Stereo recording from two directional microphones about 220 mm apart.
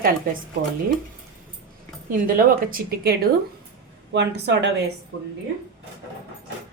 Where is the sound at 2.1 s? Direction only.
40° right (ahead or behind).